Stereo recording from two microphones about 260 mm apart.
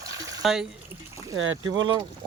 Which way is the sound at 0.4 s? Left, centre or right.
Centre.